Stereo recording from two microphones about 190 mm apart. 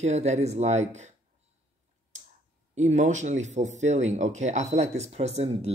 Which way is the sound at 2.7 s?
40° right (ahead or behind).